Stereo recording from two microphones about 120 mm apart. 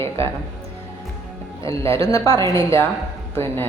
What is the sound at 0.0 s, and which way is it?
Speech, 20° left (ahead or behind).